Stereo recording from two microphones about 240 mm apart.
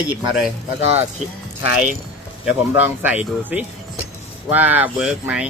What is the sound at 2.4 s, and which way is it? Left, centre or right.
Speech, centre.